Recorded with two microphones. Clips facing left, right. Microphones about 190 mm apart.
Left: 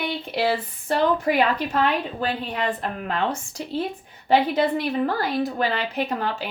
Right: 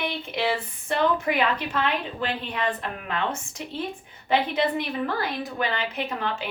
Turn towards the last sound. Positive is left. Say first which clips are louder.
# left 3 dB
turn(degrees=40)  # may be behind; listen again after turning